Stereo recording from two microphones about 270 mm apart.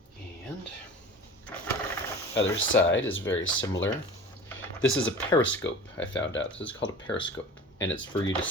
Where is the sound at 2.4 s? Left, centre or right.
Left.